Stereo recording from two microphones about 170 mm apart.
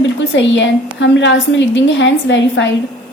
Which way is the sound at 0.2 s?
90° left.